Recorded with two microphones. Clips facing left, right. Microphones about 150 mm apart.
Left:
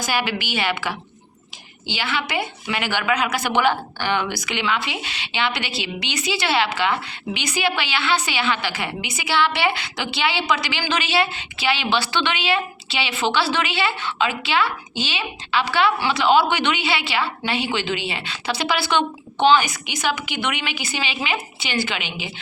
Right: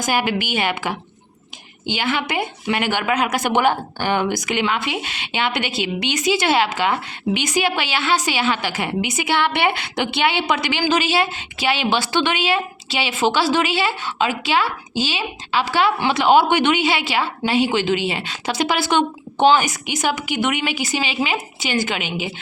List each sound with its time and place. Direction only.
0.0 s a woman's voice: 45° right (ahead or behind)